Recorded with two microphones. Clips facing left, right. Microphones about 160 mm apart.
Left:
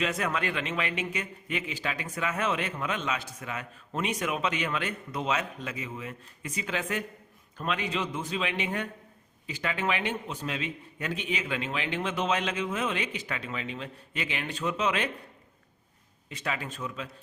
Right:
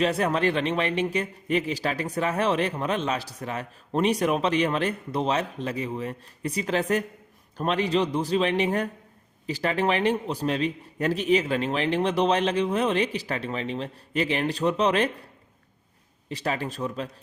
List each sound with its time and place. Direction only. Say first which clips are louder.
0.0 s a man's voice: right 7 dB; 35° right (ahead or behind)
16.3 s a man's voice: right 6 dB; 35° right (ahead or behind)